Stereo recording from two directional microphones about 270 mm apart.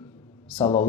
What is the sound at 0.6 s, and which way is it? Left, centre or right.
Speech, left.